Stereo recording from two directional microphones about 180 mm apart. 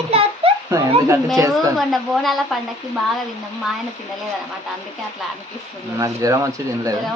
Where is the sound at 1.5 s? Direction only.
Centre (ahead or behind).